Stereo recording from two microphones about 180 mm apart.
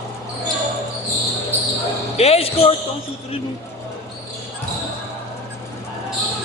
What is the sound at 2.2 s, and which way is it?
Speech, 35° left (ahead or behind).